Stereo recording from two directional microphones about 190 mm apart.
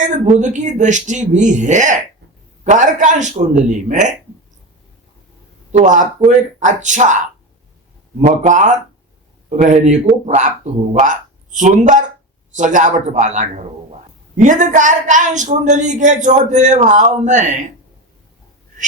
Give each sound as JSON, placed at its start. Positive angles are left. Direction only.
{"t": 0.0, "sound": "a woman's voice", "side_deg": -40}
{"t": 5.7, "sound": "a woman's voice", "side_deg": -40}
{"t": 8.2, "sound": "a woman's voice", "side_deg": -40}